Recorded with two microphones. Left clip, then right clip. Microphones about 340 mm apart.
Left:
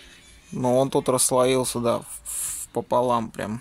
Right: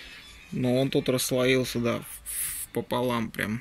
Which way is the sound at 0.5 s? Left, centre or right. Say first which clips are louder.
Left 6 dB; left.